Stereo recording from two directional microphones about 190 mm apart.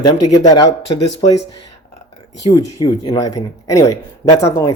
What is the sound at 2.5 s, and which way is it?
Speech, 20° left (ahead or behind).